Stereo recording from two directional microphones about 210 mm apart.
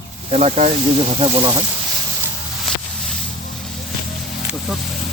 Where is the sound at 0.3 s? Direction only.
30° right (ahead or behind).